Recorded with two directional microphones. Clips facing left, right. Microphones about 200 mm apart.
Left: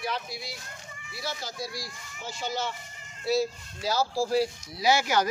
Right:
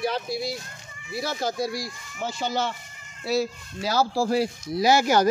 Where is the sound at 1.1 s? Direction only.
50° right (ahead or behind).